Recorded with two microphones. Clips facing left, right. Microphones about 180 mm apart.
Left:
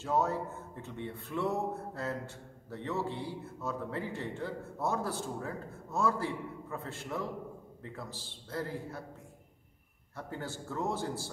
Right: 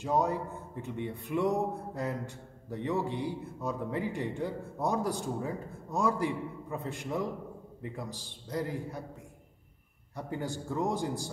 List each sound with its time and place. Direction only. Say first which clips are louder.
0.0 s speech: right 2 dB; 15° right (ahead or behind)
10.1 s speech: right 5 dB; 15° right (ahead or behind)